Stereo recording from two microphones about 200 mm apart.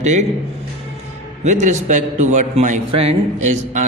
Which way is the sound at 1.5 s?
35° right (ahead or behind).